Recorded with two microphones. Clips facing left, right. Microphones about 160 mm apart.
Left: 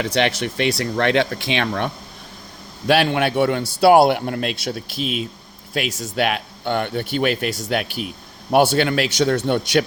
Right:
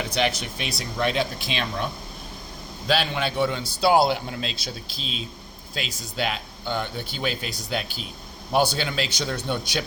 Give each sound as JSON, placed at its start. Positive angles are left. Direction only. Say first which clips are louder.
{"t": 0.0, "sound": "a man's voice", "louder": "left 5 dB", "side_deg": 75}
{"t": 8.5, "sound": "a man's voice", "louder": "left 7 dB", "side_deg": 75}